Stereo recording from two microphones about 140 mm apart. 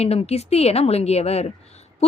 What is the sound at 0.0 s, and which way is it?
Speech, 50° left (ahead or behind).